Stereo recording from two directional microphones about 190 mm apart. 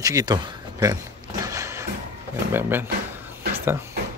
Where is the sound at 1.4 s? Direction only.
15° right (ahead or behind).